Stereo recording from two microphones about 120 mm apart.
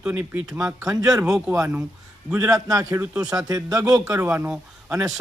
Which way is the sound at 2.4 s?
30° right (ahead or behind).